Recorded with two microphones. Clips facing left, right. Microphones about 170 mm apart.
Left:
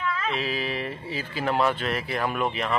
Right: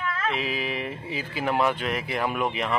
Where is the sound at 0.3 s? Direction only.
15° right (ahead or behind).